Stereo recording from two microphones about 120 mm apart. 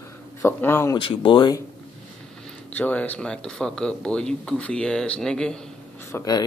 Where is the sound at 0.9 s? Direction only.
45° left (ahead or behind).